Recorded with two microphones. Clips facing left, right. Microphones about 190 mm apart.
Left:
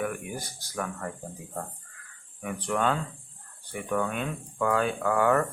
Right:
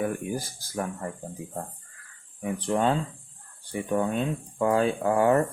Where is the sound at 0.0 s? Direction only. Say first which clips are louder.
Right 4 dB; 30° right (ahead or behind).